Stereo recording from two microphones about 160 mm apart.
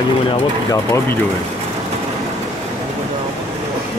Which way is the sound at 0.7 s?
20° left (ahead or behind).